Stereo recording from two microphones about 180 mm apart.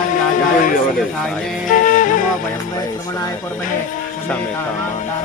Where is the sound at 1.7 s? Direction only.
45° left (ahead or behind).